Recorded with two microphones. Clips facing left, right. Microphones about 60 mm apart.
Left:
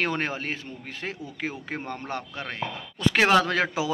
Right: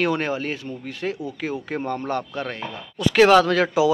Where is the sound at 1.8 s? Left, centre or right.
Right.